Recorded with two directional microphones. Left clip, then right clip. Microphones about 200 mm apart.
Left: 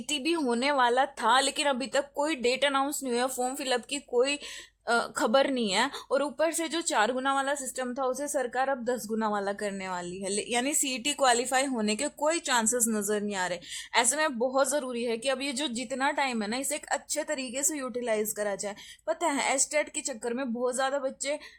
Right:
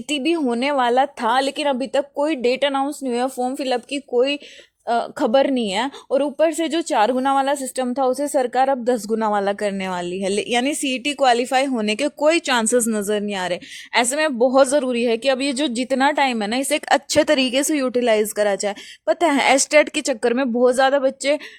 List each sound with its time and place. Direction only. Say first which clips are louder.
0.1 s a woman's voice: right 8 dB; 25° right (ahead or behind); by 21.4 s 45° right (ahead or behind)